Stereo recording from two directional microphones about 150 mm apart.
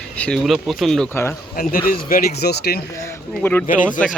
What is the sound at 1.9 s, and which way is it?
Speech, 70° left (ahead or behind).